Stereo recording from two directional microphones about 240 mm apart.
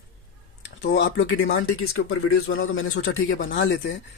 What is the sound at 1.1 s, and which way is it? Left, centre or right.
Speech, left.